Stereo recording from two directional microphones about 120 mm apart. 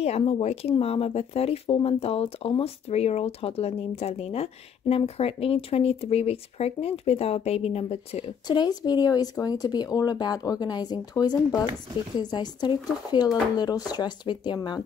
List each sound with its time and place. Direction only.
0.0 s speech: 60° left (ahead or behind)
8.5 s speech: 35° left (ahead or behind)